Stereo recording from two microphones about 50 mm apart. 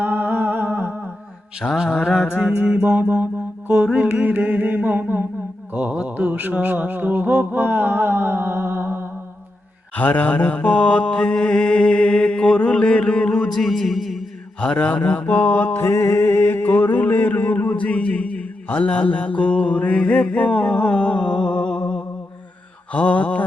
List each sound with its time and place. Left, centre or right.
0.0 s humming: right
1.6 s mantra: centre
2.0 s a sound: centre
2.8 s mantra: right
3.7 s a sound: right
9.9 s mantra: left
13.5 s music: centre
14.6 s mantra: left
15.3 s mantra: left
15.9 s mantra: left